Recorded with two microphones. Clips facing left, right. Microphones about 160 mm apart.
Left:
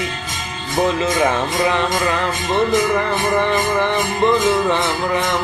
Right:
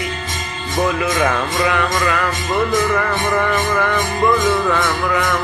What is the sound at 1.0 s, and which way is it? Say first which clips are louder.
Music: left 1 dB; 25° left (ahead or behind).